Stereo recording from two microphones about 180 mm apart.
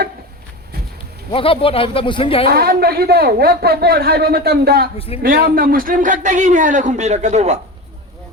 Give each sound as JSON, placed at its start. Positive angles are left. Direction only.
{"t": 1.3, "sound": "speech", "side_deg": 30}
{"t": 2.5, "sound": "speech", "side_deg": -60}
{"t": 4.9, "sound": "speech", "side_deg": 30}
{"t": 5.2, "sound": "a man's voice", "side_deg": -50}